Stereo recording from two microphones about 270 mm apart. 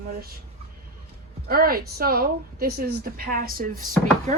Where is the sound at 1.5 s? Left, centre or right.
Right.